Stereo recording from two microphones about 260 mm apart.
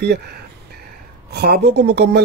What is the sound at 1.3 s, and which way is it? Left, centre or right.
Speech, right.